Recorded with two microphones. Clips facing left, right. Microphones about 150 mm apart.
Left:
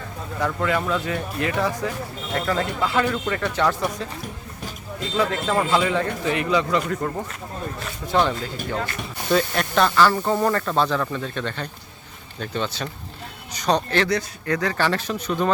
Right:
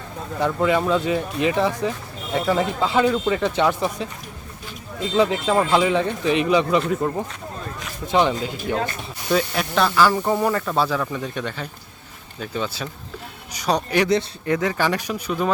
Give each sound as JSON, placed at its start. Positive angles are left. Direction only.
{"t": 0.3, "sound": "speech", "side_deg": -20}
{"t": 5.1, "sound": "speech", "side_deg": -15}
{"t": 8.1, "sound": "speech", "side_deg": -15}
{"t": 9.3, "sound": "speech", "side_deg": -5}